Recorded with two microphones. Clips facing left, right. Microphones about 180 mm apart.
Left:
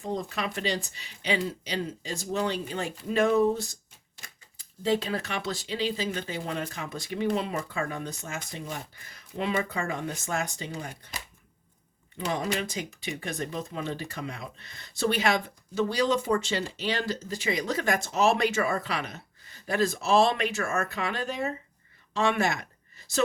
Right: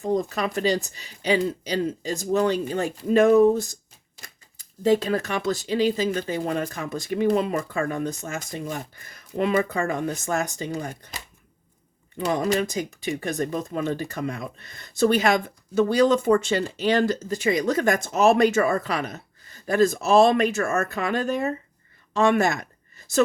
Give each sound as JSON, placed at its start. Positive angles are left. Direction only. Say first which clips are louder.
{"t": 0.0, "sound": "speech", "louder": "right 7 dB", "side_deg": -40}
{"t": 12.1, "sound": "speech", "louder": "right 7 dB", "side_deg": -45}